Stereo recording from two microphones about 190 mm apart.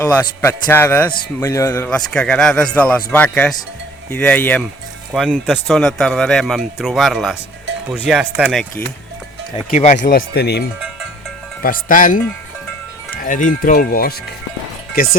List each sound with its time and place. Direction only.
0.0 s a man's voice: 10° left (ahead or behind)
5.1 s speech: centre (ahead or behind)
9.7 s speech: 40° left (ahead or behind); by 10.6 s 60° left (ahead or behind)
11.6 s speech: 45° left (ahead or behind)
13.2 s speech: 40° left (ahead or behind)